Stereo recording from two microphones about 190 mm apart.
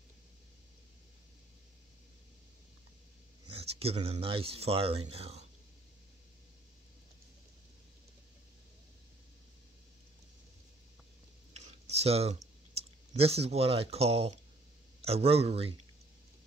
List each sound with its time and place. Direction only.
3.5 s speech: 30° right (ahead or behind)
11.5 s a sound: 35° right (ahead or behind)
12.7 s speech: 30° right (ahead or behind)